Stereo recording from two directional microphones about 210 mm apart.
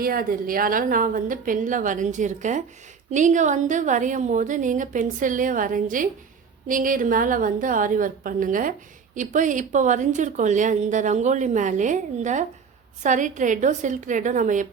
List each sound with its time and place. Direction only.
0.0 s a woman's voice: 45° right (ahead or behind)